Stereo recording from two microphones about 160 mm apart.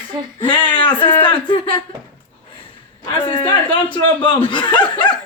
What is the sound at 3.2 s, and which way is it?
Speech, 35° left (ahead or behind).